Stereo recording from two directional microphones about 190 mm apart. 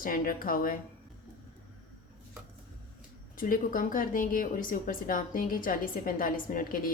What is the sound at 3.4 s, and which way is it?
A woman's voice, 45° left (ahead or behind).